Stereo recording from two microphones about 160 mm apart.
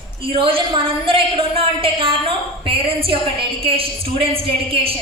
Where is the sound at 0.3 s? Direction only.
35° right (ahead or behind).